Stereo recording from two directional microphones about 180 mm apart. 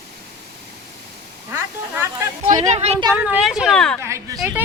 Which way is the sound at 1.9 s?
15° right (ahead or behind).